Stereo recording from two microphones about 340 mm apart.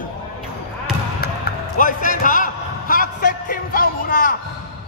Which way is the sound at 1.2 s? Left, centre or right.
Left.